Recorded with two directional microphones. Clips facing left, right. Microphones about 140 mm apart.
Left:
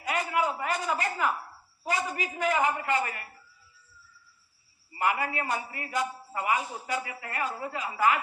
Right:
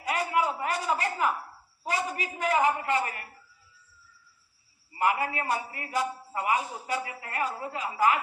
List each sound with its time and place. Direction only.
0.1 s a man's voice: 30° right (ahead or behind)
4.9 s a man's voice: 35° right (ahead or behind)